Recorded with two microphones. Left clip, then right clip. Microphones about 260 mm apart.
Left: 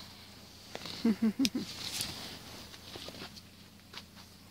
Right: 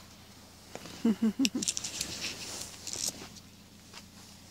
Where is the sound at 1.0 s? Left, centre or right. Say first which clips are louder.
Right 2 dB; centre.